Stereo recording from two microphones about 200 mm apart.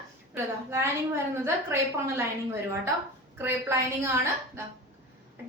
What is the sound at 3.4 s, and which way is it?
Speech, 15° right (ahead or behind).